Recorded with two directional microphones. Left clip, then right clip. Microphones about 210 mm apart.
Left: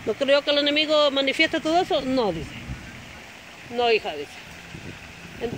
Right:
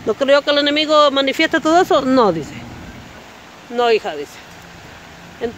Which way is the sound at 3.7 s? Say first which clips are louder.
Right 6 dB; 20° right (ahead or behind).